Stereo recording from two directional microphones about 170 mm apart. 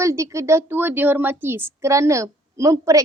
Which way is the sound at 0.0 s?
15° right (ahead or behind).